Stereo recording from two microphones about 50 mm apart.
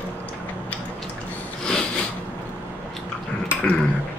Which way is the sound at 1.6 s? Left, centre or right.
Centre.